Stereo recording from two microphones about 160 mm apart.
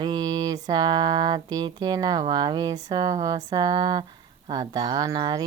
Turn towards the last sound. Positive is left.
turn(degrees=-25)  # may be behind; listen again after turning